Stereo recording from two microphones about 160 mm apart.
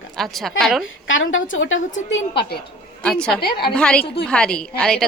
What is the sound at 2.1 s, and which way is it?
Speech, 90° left.